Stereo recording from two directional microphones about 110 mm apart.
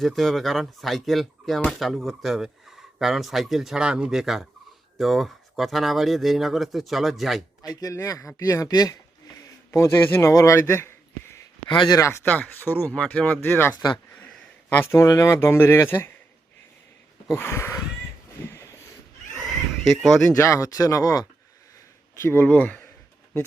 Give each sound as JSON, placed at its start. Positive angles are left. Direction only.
{"t": 0.0, "sound": "speech", "side_deg": 0}
{"t": 7.6, "sound": "speech", "side_deg": 35}
{"t": 11.7, "sound": "speech", "side_deg": 45}
{"t": 12.2, "sound": "speech", "side_deg": 15}
{"t": 13.7, "sound": "speech", "side_deg": 40}
{"t": 14.2, "sound": "a sound", "side_deg": 10}
{"t": 15.0, "sound": "speech", "side_deg": 30}
{"t": 17.3, "sound": "speech", "side_deg": 25}
{"t": 18.4, "sound": "a sound", "side_deg": 25}
{"t": 19.9, "sound": "speech", "side_deg": 0}
{"t": 20.4, "sound": "speech", "side_deg": 30}
{"t": 22.2, "sound": "speech", "side_deg": 20}